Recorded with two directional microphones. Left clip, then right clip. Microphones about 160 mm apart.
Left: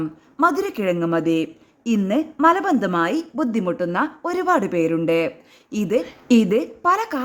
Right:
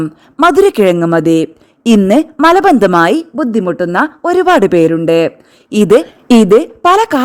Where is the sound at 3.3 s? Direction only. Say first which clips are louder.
Right 9 dB; 40° right (ahead or behind).